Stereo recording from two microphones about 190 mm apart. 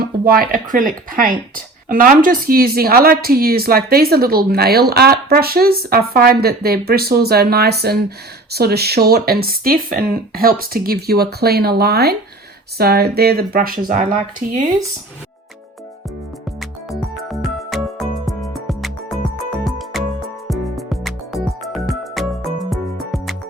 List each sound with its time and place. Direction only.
0.0 s speech: 50° right (ahead or behind)
16.6 s music: centre (ahead or behind)